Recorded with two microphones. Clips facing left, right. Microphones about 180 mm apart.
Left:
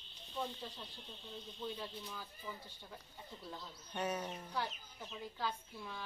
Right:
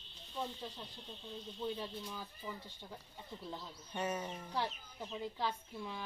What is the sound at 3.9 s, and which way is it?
Speech, 5° right (ahead or behind).